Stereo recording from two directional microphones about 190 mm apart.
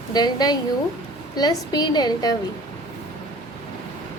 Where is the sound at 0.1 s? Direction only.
20° left (ahead or behind).